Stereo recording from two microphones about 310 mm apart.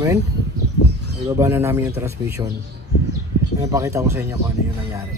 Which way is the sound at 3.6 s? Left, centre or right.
Centre.